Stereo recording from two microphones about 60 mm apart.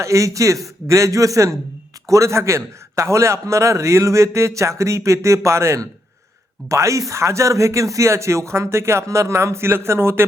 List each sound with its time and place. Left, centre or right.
0.0 s a man's voice: right